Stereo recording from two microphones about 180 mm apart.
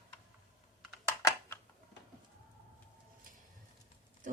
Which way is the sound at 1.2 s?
15° left (ahead or behind).